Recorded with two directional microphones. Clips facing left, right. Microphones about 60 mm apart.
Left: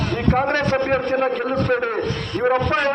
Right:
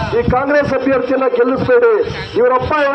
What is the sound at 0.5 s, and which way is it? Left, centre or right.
A man's voice, right.